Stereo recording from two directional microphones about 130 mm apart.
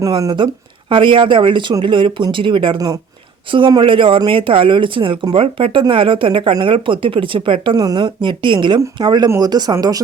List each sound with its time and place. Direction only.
0.0 s speech: 30° right (ahead or behind)